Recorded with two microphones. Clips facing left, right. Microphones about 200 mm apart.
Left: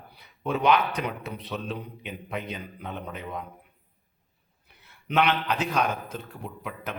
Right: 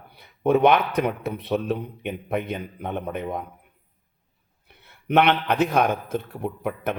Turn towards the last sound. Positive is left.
turn(degrees=-55)  # may be behind; listen again after turning